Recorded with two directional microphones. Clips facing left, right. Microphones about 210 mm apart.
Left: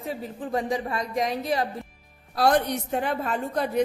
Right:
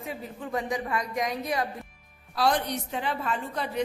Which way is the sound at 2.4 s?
50° left (ahead or behind).